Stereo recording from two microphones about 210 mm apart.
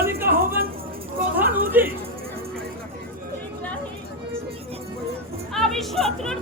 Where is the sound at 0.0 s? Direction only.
10° right (ahead or behind).